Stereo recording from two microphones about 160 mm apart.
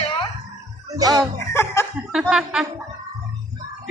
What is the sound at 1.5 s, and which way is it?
Laughter, 15° left (ahead or behind).